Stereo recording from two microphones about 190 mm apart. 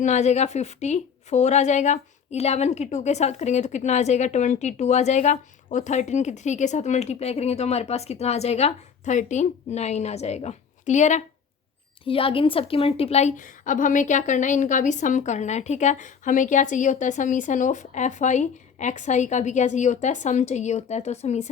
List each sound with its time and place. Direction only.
0.0 s a woman's voice: 35° left (ahead or behind)
12.0 s a woman's voice: 30° left (ahead or behind)